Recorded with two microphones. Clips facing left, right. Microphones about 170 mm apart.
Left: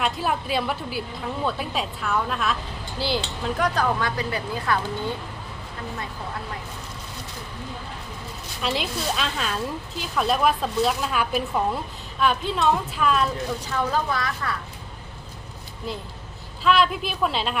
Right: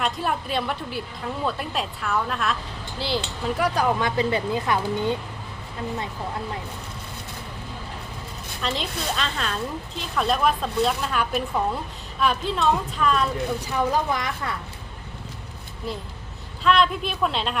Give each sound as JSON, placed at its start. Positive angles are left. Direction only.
{"t": 0.0, "sound": "a woman's voice", "side_deg": 5}
{"t": 8.6, "sound": "a woman's voice", "side_deg": 5}
{"t": 13.7, "sound": "speech", "side_deg": -15}
{"t": 16.6, "sound": "a woman's voice", "side_deg": 5}